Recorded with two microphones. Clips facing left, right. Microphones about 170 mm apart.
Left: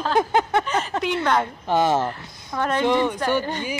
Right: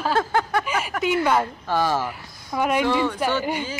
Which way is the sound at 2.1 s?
10° right (ahead or behind).